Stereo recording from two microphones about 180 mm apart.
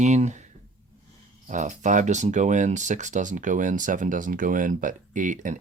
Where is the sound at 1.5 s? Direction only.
45° right (ahead or behind).